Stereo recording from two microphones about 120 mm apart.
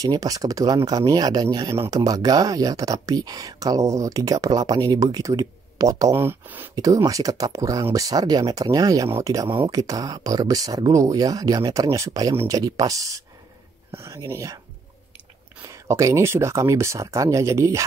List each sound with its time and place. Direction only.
0.0 s speech: 30° right (ahead or behind)
6.7 s speech: 30° right (ahead or behind)
15.7 s speech: 25° right (ahead or behind)